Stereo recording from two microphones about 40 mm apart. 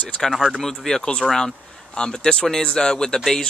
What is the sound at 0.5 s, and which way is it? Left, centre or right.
Speech, centre.